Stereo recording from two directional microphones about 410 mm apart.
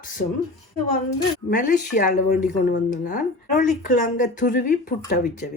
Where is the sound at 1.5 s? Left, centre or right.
Centre.